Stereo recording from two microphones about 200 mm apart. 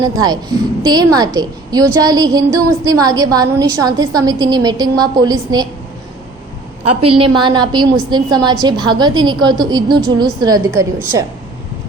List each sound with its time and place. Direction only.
0.0 s a woman's voice: 20° right (ahead or behind)
7.0 s a woman's voice: 25° right (ahead or behind)